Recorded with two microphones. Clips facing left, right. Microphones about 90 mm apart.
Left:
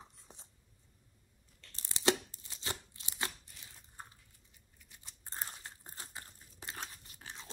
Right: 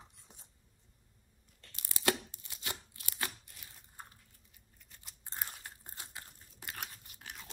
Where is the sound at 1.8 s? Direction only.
25° left (ahead or behind).